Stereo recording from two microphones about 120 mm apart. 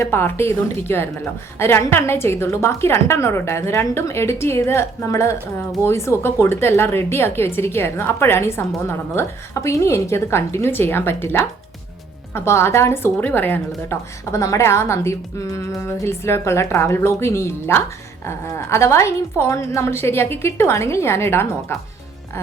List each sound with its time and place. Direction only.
0.0 s a woman's voice: 20° left (ahead or behind)